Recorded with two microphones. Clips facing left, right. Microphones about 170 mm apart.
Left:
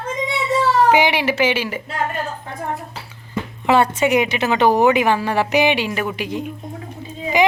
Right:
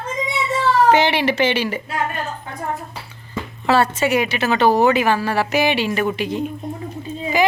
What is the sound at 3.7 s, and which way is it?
A woman's voice, 15° left (ahead or behind).